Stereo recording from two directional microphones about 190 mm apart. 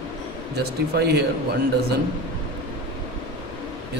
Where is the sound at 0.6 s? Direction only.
60° right (ahead or behind).